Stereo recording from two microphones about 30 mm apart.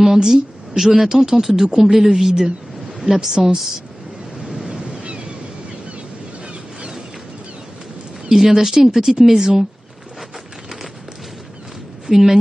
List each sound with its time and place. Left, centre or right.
0.0 s a woman's voice: centre
4.5 s waves: right
4.8 s ocean: right
8.3 s speech: centre
12.1 s speech: centre